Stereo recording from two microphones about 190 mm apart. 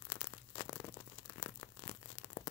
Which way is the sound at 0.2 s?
20° left (ahead or behind).